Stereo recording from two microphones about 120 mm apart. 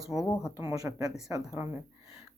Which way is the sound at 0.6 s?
25° right (ahead or behind).